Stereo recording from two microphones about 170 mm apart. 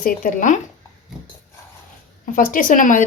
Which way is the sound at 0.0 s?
50° left (ahead or behind).